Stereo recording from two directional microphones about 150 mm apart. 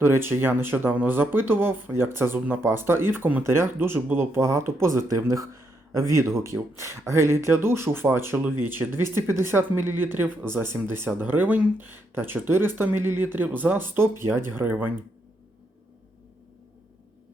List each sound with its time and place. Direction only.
0.0 s speech: 15° right (ahead or behind)